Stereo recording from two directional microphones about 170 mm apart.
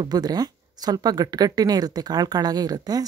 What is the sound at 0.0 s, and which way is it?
Speech, 25° right (ahead or behind).